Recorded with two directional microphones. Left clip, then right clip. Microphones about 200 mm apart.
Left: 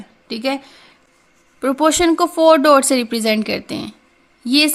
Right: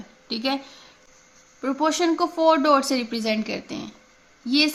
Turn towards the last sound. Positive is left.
turn(degrees=40)  # may be behind; listen again after turning